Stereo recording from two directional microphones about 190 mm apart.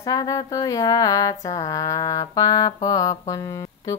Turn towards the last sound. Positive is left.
turn(degrees=15)  # may be behind; listen again after turning